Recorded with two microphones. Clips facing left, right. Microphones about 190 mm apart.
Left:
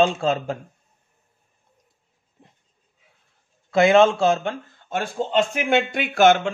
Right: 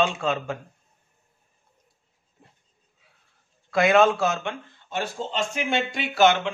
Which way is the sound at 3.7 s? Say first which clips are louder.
Left 3 dB; 25° left (ahead or behind).